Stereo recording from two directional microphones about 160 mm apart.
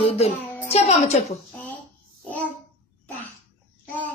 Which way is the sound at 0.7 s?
45° left (ahead or behind).